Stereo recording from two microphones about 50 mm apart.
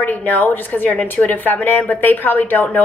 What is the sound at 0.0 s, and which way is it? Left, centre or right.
A woman's voice, left.